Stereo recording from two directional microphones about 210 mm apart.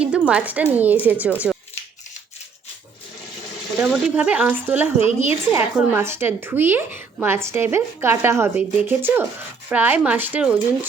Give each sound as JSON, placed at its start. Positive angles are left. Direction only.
{"t": 0.0, "sound": "a woman's voice", "side_deg": -5}
{"t": 3.8, "sound": "a woman's voice", "side_deg": -5}
{"t": 4.9, "sound": "a woman's voice", "side_deg": 30}
{"t": 5.5, "sound": "a woman's voice", "side_deg": -10}